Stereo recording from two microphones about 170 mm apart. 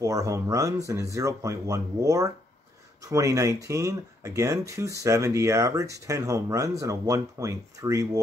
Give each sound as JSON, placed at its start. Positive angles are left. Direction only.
{"t": 0.0, "sound": "speech", "side_deg": -20}